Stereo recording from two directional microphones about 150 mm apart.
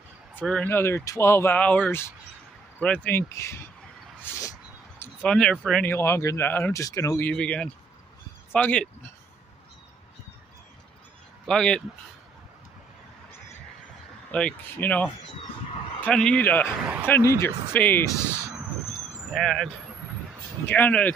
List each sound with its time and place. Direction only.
0.5 s speech: 10° left (ahead or behind)
4.2 s a sound: 20° left (ahead or behind)
5.3 s speech: 5° left (ahead or behind)
5.9 s speech: 15° left (ahead or behind)
11.4 s speech: 5° left (ahead or behind)
14.3 s speech: 10° left (ahead or behind)
18.6 s a sound: centre (ahead or behind)
20.6 s speech: 10° left (ahead or behind)